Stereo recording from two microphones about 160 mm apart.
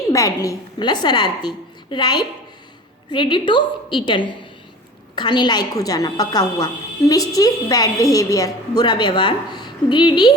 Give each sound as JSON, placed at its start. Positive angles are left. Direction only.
{"t": 0.1, "sound": "a woman's voice", "side_deg": 20}